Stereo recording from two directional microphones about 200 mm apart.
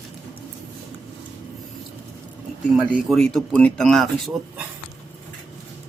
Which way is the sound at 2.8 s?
Centre (ahead or behind).